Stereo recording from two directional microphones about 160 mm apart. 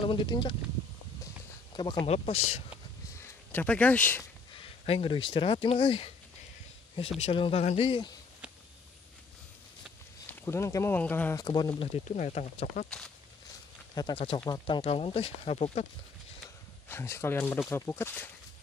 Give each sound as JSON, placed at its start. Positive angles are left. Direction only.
{"t": 0.0, "sound": "speech", "side_deg": 30}
{"t": 1.2, "sound": "a sound", "side_deg": 30}
{"t": 2.0, "sound": "speech", "side_deg": 40}
{"t": 3.2, "sound": "speech", "side_deg": 10}
{"t": 4.6, "sound": "speech", "side_deg": 35}
{"t": 7.2, "sound": "speech", "side_deg": 35}
{"t": 10.3, "sound": "speech", "side_deg": 15}
{"t": 11.3, "sound": "speech", "side_deg": 25}
{"t": 12.1, "sound": "speech", "side_deg": 45}
{"t": 13.9, "sound": "speech", "side_deg": 30}
{"t": 16.9, "sound": "speech", "side_deg": 15}